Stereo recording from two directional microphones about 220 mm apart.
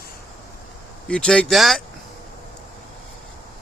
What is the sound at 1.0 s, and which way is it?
Speech, 5° left (ahead or behind).